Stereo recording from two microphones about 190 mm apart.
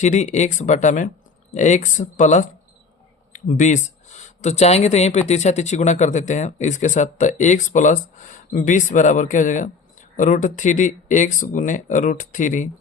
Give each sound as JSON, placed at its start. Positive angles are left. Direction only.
{"t": 0.0, "sound": "speech", "side_deg": 40}